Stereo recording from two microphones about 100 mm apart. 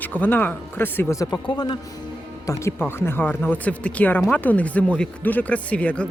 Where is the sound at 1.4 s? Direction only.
50° left (ahead or behind).